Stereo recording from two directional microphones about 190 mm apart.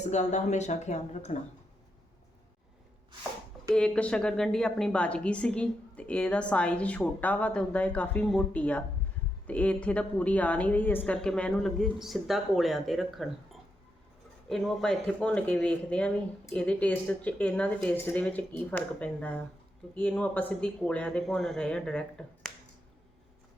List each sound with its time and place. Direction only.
0.0 s speech: 35° left (ahead or behind)
3.7 s a woman's voice: 5° left (ahead or behind)